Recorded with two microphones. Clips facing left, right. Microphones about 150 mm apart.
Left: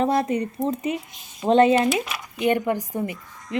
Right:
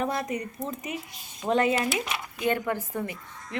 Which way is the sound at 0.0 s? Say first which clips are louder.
Left 8 dB; 30° left (ahead or behind).